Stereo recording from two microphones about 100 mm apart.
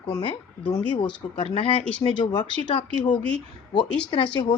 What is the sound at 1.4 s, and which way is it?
Speech, 65° left (ahead or behind).